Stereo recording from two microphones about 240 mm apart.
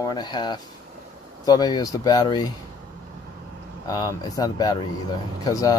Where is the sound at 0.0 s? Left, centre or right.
Centre.